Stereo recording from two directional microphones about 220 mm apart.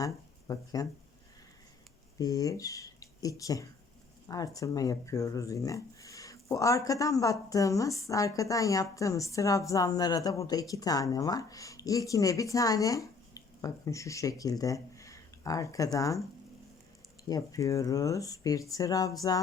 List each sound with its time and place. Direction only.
0.0 s speech: 15° left (ahead or behind)
2.1 s speech: 15° left (ahead or behind)
17.2 s speech: 15° left (ahead or behind)